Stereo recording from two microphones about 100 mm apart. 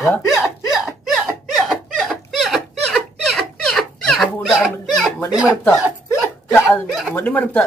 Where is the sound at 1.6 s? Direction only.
Centre (ahead or behind).